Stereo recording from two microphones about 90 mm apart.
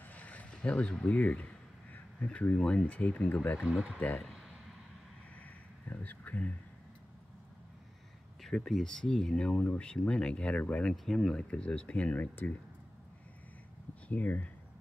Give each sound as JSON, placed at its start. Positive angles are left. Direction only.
{"t": 0.1, "sound": "a sound", "side_deg": 15}
{"t": 2.1, "sound": "speech", "side_deg": 15}
{"t": 3.5, "sound": "speech", "side_deg": 0}
{"t": 5.9, "sound": "a sound", "side_deg": 20}
{"t": 8.4, "sound": "speech", "side_deg": 5}
{"t": 14.0, "sound": "speech", "side_deg": 15}